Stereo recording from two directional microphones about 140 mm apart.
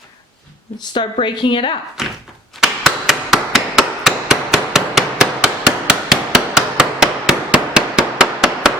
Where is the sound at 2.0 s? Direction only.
5° right (ahead or behind).